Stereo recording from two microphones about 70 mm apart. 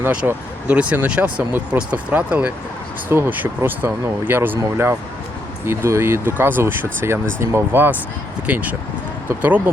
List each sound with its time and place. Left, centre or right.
0.2 s speech: centre